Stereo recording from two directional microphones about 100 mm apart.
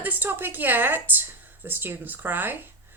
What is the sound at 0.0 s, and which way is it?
A woman's voice, 15° right (ahead or behind).